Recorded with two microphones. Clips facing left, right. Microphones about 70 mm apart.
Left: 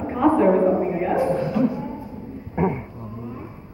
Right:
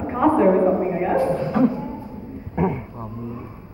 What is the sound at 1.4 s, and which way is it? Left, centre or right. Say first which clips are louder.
Beatboxing: right 2 dB; right.